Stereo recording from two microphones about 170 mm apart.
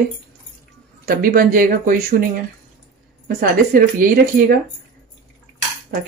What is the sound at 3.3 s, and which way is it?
Speech, 55° right (ahead or behind).